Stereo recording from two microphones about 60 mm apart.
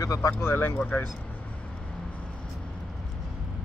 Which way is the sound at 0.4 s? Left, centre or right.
Left.